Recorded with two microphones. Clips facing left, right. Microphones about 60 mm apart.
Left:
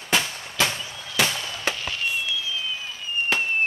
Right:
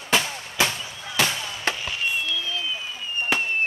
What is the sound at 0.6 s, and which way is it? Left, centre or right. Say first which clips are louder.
Fireworks: even; centre.